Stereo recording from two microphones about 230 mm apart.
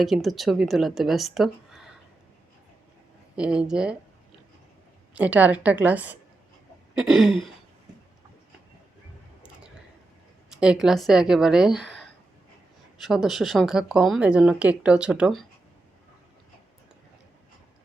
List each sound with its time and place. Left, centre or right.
0.0 s speech: centre
3.3 s speech: centre
5.1 s a woman's voice: centre
10.5 s speech: centre
13.0 s speech: centre